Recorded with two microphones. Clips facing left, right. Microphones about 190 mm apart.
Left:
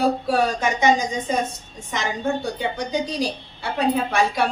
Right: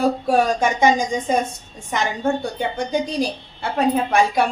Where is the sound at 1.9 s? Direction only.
50° right (ahead or behind).